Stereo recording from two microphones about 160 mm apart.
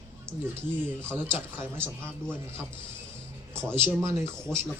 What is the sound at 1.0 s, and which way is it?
Speech, 15° right (ahead or behind).